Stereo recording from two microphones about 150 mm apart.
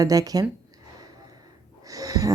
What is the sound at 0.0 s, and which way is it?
Speech, 25° right (ahead or behind).